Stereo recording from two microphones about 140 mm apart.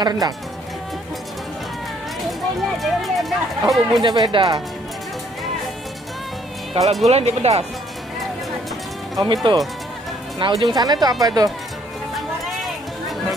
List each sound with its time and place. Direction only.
0.0 s speech: 25° right (ahead or behind)
2.8 s speech: centre (ahead or behind)
4.0 s speech: 30° right (ahead or behind)
6.7 s speech: 50° right (ahead or behind)
9.2 s speech: 30° right (ahead or behind)